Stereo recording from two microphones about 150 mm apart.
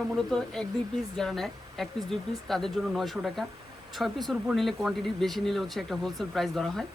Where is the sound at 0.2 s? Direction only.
5° left (ahead or behind).